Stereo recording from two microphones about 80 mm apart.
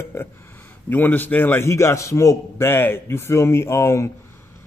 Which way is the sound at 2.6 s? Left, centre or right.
Left.